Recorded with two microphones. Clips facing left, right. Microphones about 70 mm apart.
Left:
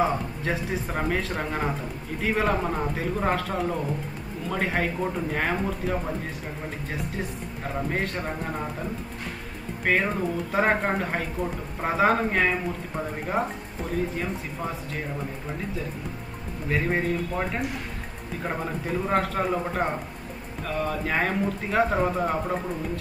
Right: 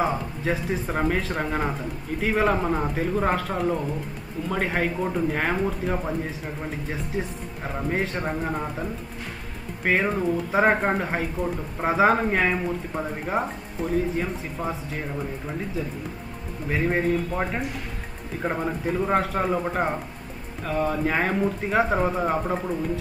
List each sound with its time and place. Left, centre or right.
0.0 s speech: centre
7.6 s speech: centre
9.8 s speech: centre
16.7 s speech: centre